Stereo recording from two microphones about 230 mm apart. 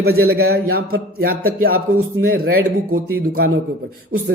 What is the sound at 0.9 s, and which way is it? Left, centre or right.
Speech, right.